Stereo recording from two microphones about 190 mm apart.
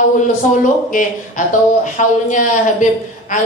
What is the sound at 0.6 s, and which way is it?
A man's voice, 45° left (ahead or behind).